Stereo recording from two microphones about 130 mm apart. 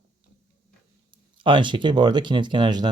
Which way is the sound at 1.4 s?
40° right (ahead or behind).